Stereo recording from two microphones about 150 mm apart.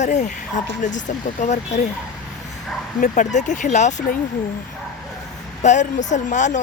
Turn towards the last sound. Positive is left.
turn(degrees=55)  # may be behind; listen again after turning